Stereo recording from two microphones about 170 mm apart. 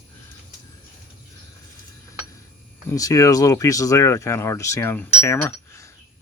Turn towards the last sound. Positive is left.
turn(degrees=15)  # may be behind; listen again after turning